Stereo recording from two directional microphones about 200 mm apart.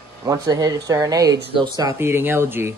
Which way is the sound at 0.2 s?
15° right (ahead or behind).